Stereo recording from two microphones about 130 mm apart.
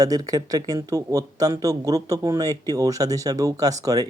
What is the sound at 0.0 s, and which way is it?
Speech, 30° right (ahead or behind).